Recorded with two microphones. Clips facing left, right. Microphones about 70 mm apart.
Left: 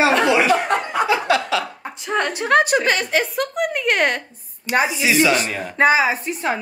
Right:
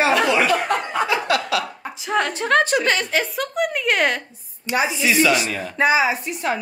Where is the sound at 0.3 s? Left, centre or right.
Centre.